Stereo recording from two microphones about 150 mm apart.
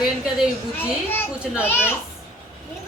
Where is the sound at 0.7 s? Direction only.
15° left (ahead or behind).